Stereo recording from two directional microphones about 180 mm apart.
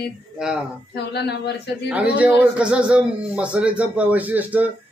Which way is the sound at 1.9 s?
10° right (ahead or behind).